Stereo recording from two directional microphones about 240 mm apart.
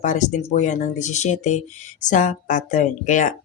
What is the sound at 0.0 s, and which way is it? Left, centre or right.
Speech, left.